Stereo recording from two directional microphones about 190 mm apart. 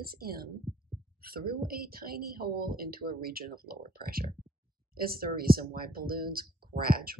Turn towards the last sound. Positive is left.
turn(degrees=-50)  # may be behind; listen again after turning